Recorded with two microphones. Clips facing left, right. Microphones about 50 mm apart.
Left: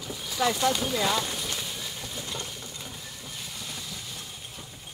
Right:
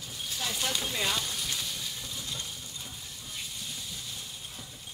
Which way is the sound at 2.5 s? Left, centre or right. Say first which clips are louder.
Left 3 dB; left.